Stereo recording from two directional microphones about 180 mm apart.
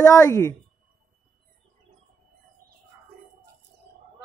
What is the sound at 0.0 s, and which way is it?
Speech, 20° left (ahead or behind).